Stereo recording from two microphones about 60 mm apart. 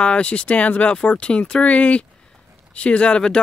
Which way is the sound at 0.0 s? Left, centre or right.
Centre.